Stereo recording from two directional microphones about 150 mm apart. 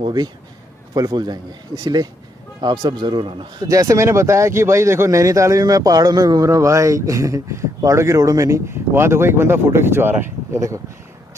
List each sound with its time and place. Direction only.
0.0 s a man's voice: 25° right (ahead or behind)